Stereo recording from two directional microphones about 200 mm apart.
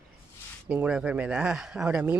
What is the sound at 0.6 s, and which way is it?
Speech, 5° right (ahead or behind).